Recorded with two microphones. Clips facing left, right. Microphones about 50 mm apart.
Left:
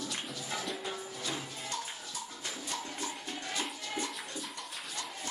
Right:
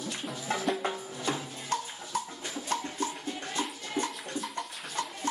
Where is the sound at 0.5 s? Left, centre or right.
Right.